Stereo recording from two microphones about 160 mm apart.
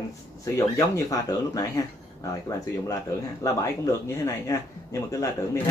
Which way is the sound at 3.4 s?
20° left (ahead or behind).